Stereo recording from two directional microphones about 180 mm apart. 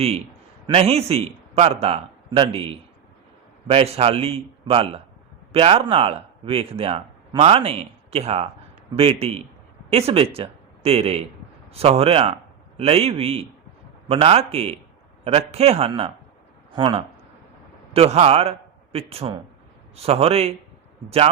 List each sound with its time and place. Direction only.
0.7 s a man's voice: 35° right (ahead or behind)